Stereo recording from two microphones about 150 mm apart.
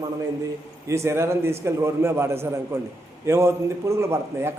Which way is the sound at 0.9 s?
20° right (ahead or behind).